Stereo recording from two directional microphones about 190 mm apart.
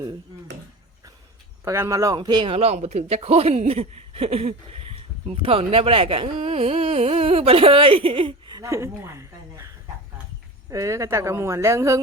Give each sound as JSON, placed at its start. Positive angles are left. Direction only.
{"t": 1.6, "sound": "a man's voice", "side_deg": -15}